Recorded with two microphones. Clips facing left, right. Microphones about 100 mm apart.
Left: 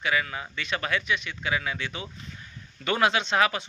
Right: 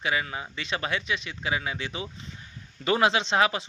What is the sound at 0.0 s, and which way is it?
Speech, 25° right (ahead or behind).